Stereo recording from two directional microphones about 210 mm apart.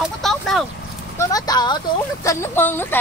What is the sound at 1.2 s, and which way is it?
Speech, 20° left (ahead or behind).